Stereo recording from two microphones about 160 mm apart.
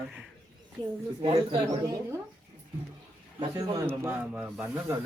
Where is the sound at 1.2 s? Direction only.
35° right (ahead or behind).